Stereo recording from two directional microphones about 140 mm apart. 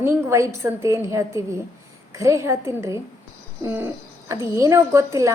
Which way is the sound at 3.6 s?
15° right (ahead or behind).